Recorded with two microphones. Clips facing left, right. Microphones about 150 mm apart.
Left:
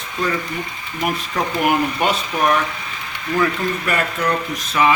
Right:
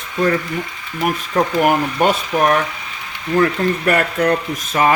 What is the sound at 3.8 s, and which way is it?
Speech, 55° right (ahead or behind).